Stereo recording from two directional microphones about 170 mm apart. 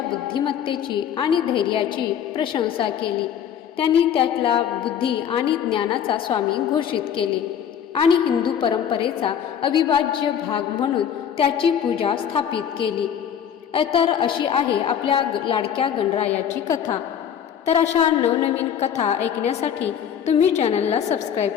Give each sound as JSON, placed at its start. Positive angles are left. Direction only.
{"t": 0.3, "sound": "a woman's voice", "side_deg": 30}
{"t": 8.4, "sound": "a woman's voice", "side_deg": 30}
{"t": 16.6, "sound": "a woman's voice", "side_deg": 20}
{"t": 17.7, "sound": "a woman's voice", "side_deg": 40}